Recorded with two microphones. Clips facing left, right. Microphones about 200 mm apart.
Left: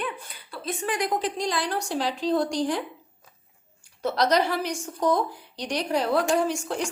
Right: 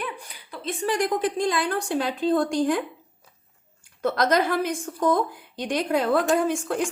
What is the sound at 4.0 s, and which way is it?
A woman's voice, 50° right (ahead or behind).